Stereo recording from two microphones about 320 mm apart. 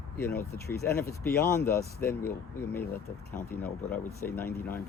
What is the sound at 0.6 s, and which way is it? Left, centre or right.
Speech, left.